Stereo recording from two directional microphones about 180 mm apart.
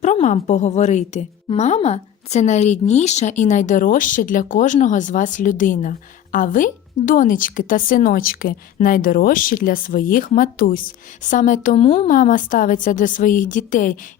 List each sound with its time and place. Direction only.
0.0 s a woman's voice: 40° left (ahead or behind)